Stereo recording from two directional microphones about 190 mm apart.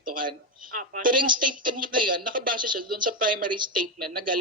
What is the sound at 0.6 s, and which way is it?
Speech, 45° right (ahead or behind).